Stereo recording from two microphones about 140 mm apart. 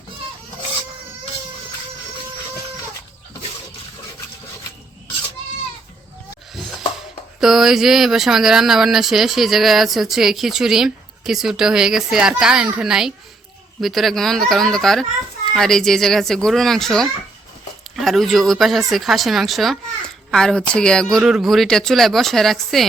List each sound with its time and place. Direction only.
7.4 s speech: 5° right (ahead or behind)